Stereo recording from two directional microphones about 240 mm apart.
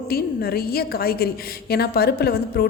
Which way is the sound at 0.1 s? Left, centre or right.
Left.